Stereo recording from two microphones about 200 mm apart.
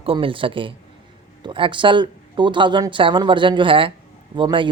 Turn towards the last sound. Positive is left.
turn(degrees=-25)  # may be behind; listen again after turning